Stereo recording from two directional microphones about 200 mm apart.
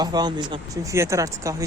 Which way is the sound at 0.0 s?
20° right (ahead or behind).